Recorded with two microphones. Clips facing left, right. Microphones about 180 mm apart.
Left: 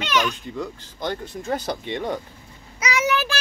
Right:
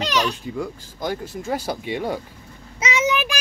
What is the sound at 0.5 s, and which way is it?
Speech, 10° right (ahead or behind).